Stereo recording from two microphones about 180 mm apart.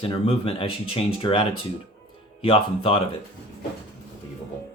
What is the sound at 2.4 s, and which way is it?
Speech, 30° left (ahead or behind).